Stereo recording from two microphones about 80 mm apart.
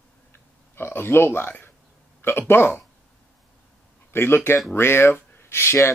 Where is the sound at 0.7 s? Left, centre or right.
Left.